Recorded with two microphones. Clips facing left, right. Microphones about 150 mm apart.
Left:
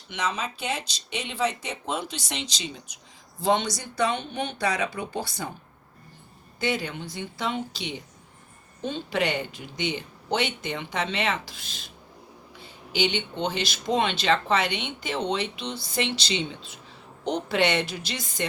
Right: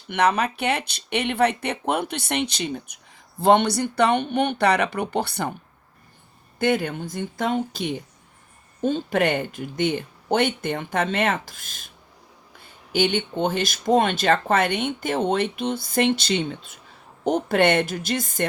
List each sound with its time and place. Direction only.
0.1 s speech: 60° right (ahead or behind)
6.6 s speech: 55° right (ahead or behind)